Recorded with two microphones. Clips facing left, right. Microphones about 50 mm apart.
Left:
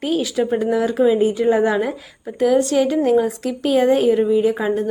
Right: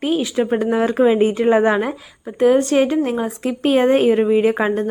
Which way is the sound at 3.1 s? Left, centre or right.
Right.